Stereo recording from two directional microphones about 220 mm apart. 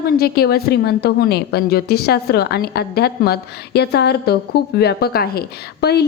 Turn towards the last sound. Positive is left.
turn(degrees=45)  # may be behind; listen again after turning